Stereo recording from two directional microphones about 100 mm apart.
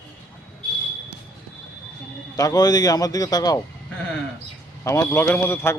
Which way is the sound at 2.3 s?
40° left (ahead or behind).